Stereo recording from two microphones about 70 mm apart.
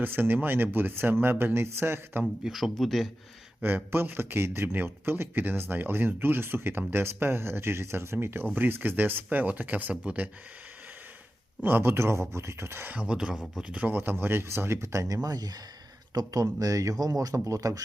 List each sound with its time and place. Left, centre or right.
0.0 s a man's voice: right
2.4 s speech: centre
3.6 s a man's voice: right
11.6 s a man's voice: right
12.9 s a man's voice: centre; by 17.8 s right